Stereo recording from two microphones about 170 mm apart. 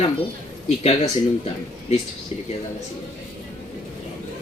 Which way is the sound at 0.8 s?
40° left (ahead or behind).